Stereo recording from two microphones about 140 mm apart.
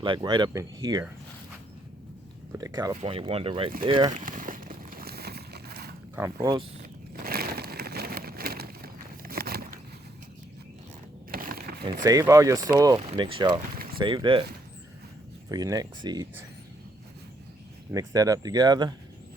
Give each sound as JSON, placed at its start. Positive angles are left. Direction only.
{"t": 0.0, "sound": "speech", "side_deg": -35}
{"t": 2.6, "sound": "speech", "side_deg": -25}
{"t": 2.9, "sound": "speech", "side_deg": -40}
{"t": 4.1, "sound": "a sound", "side_deg": -75}
{"t": 6.1, "sound": "speech", "side_deg": -15}
{"t": 7.2, "sound": "a sound", "side_deg": -90}
{"t": 11.3, "sound": "a sound", "side_deg": -90}
{"t": 12.2, "sound": "speech", "side_deg": -20}
{"t": 13.2, "sound": "speech", "side_deg": -40}
{"t": 13.6, "sound": "a sound", "side_deg": -90}
{"t": 14.0, "sound": "speech", "side_deg": -35}
{"t": 15.4, "sound": "speech", "side_deg": -25}
{"t": 17.9, "sound": "speech", "side_deg": -25}